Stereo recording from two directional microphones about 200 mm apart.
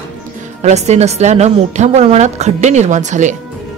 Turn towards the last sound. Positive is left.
turn(degrees=-35)  # may be behind; listen again after turning